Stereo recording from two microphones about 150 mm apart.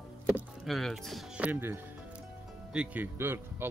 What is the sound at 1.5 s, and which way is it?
Speech, 15° right (ahead or behind).